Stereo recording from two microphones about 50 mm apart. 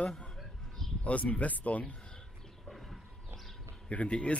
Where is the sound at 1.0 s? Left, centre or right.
Left.